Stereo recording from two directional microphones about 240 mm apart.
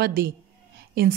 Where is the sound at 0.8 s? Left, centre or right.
Right.